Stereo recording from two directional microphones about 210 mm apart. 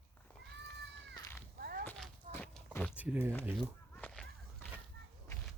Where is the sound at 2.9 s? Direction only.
5° right (ahead or behind).